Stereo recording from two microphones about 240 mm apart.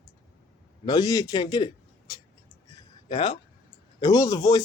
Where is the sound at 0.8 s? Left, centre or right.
Centre.